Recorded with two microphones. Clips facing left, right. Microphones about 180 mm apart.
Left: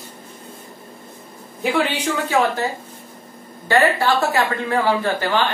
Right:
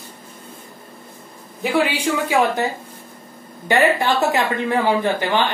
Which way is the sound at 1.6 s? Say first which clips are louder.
Right 1 dB; 10° right (ahead or behind).